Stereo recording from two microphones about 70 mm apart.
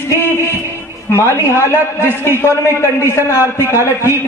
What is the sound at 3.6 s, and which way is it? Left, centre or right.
Speech, left.